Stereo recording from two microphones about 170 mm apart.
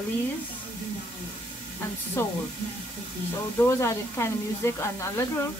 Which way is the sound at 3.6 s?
15° left (ahead or behind).